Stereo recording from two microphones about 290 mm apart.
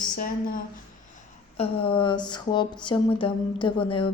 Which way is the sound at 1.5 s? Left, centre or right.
Centre.